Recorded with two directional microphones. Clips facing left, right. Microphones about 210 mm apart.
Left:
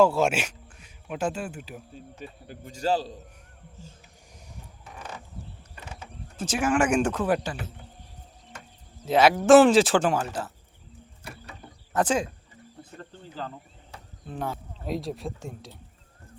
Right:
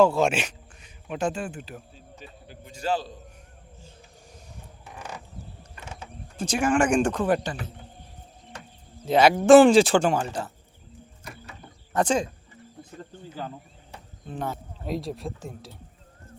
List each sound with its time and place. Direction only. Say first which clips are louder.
0.0 s speech: right 1 dB; 10° left (ahead or behind)
1.9 s a man's voice: left 4 dB; 50° left (ahead or behind)
6.3 s speech: right 2 dB; 5° left (ahead or behind)
9.0 s speech: right 2 dB; 5° left (ahead or behind)
11.9 s speech: right 1 dB; 5° left (ahead or behind)
13.0 s speech: right 1 dB; 10° right (ahead or behind)
14.3 s speech: right 1 dB; 5° left (ahead or behind)